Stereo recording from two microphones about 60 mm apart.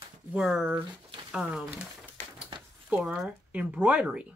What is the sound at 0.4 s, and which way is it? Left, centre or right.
Speech, centre.